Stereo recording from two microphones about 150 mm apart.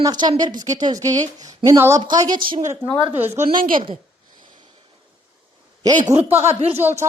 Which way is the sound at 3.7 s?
35° right (ahead or behind).